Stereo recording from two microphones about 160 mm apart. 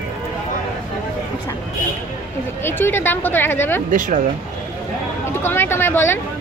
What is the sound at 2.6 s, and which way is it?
Speech, 15° left (ahead or behind).